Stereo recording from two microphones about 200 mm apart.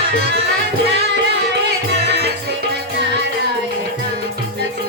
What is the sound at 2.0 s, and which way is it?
Music, 55° right (ahead or behind).